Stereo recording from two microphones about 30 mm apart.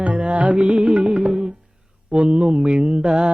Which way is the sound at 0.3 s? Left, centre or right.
Right.